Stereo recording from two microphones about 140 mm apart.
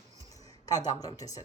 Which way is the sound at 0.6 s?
30° left (ahead or behind).